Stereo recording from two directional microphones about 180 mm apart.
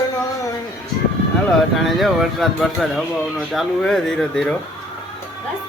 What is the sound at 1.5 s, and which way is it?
Speech, centre (ahead or behind).